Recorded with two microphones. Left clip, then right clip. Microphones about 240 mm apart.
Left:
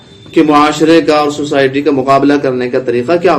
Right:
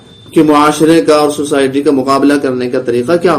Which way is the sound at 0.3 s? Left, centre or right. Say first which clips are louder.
Even; right.